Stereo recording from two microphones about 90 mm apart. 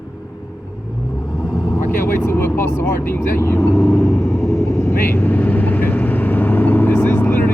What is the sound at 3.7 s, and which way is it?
Vehicle, centre (ahead or behind).